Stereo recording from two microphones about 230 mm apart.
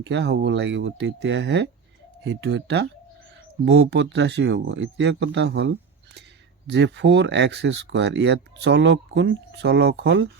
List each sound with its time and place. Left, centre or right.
0.0 s speech: right